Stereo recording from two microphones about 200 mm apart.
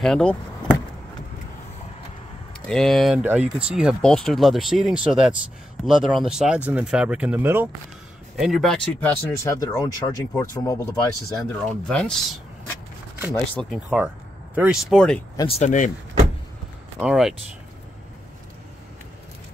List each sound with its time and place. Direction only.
0.0 s speech: 5° left (ahead or behind)
2.6 s speech: 5° left (ahead or behind)
8.4 s speech: centre (ahead or behind); by 10.8 s 20° left (ahead or behind)
11.5 s speech: 5° left (ahead or behind)
15.3 s speech: 30° left (ahead or behind)
17.0 s speech: centre (ahead or behind)